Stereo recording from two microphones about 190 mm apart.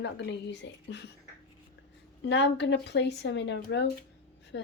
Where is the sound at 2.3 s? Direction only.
65° left (ahead or behind).